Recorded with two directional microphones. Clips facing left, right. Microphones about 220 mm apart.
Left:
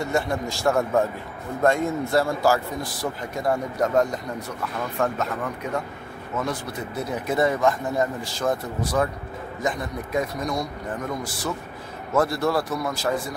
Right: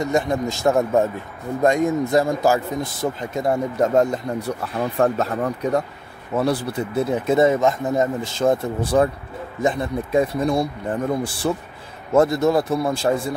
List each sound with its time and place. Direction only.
0.0 s speech: 20° right (ahead or behind)